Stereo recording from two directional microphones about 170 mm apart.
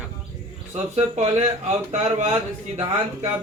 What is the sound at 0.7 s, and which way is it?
Speech, 40° right (ahead or behind).